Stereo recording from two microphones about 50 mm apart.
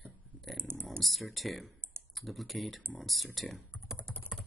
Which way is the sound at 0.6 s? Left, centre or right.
Right.